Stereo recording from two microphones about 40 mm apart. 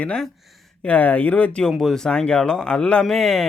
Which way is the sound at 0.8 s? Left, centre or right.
Left.